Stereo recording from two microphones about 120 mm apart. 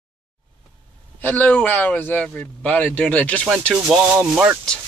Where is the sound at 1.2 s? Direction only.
15° left (ahead or behind).